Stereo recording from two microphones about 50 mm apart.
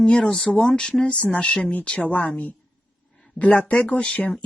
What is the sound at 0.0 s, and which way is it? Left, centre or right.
Speech, centre.